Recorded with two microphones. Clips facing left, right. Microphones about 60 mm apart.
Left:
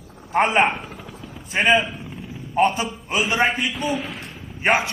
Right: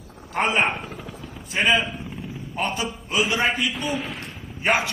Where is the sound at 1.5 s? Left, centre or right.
Left.